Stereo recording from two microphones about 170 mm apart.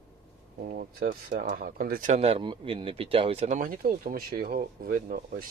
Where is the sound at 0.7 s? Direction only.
60° right (ahead or behind).